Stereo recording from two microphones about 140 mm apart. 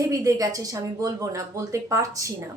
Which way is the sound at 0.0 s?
25° right (ahead or behind).